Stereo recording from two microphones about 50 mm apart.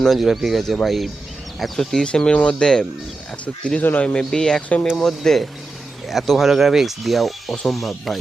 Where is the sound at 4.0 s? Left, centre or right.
Centre.